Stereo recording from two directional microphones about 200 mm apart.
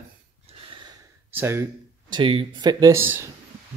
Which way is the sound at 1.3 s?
10° right (ahead or behind).